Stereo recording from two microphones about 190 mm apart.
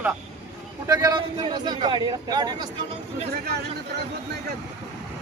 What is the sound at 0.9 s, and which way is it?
A man's voice, 20° right (ahead or behind).